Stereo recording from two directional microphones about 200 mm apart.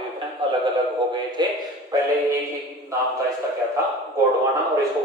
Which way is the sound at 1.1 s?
20° right (ahead or behind).